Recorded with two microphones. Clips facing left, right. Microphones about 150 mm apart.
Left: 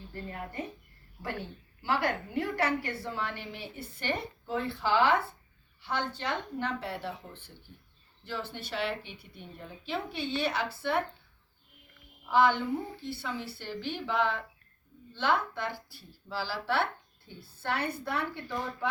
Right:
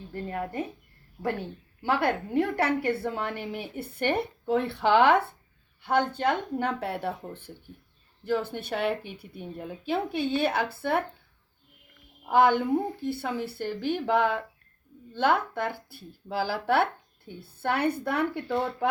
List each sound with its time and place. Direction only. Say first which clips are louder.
0.1 s a woman's voice: right 8 dB; 60° right (ahead or behind)
1.8 s a woman's voice: right 4 dB; 55° right (ahead or behind)
5.8 s a woman's voice: right 9 dB; 55° right (ahead or behind)
12.2 s a woman's voice: right 4 dB; 50° right (ahead or behind)